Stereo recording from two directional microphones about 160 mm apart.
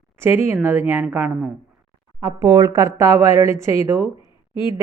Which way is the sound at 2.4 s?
25° right (ahead or behind).